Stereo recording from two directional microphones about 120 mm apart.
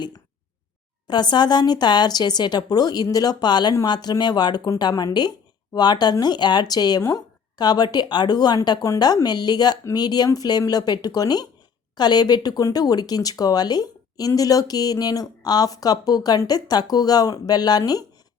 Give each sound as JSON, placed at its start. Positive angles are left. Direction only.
{"t": 1.0, "sound": "speech", "side_deg": 35}